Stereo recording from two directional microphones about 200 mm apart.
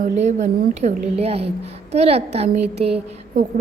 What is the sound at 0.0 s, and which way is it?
A woman's voice, 35° right (ahead or behind).